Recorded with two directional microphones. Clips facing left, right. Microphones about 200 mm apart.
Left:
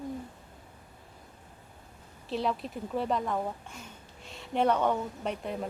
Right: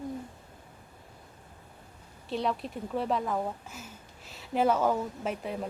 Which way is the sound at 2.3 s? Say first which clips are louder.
Even; centre (ahead or behind).